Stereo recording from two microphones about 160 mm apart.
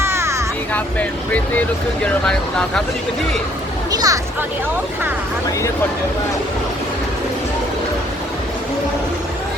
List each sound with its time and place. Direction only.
0.0 s a sound: 15° right (ahead or behind)
0.7 s speech: 10° left (ahead or behind)
3.9 s speech: 20° right (ahead or behind)